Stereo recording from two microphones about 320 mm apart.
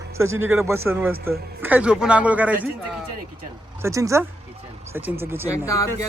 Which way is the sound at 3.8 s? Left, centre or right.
Centre.